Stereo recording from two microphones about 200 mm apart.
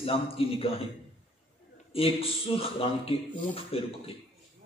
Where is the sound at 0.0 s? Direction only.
30° left (ahead or behind).